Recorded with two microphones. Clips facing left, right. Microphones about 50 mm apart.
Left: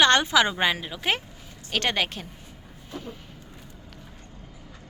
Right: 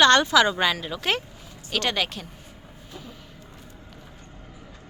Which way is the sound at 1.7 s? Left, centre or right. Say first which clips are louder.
Even; left.